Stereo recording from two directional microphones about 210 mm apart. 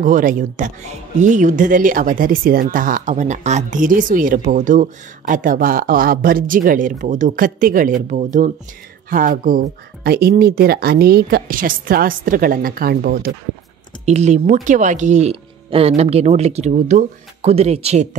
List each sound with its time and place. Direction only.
0.0 s speech: 40° right (ahead or behind)
14.0 s speech: 30° right (ahead or behind)